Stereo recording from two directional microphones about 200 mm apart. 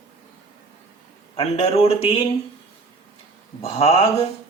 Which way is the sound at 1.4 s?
30° left (ahead or behind).